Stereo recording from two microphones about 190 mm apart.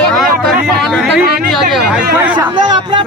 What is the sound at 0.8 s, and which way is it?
Chatter, centre (ahead or behind).